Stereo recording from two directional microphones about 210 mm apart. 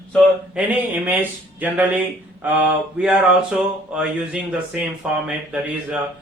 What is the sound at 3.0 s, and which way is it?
Speech, 5° right (ahead or behind).